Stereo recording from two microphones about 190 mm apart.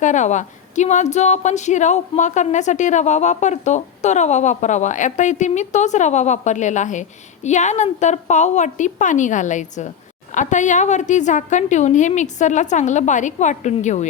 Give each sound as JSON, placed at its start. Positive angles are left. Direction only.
{"t": 0.0, "sound": "speech", "side_deg": 40}